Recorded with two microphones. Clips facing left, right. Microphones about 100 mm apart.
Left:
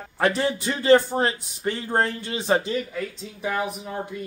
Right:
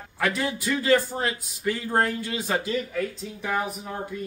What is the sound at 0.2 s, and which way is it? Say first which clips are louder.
Speech: left 4 dB; 30° left (ahead or behind).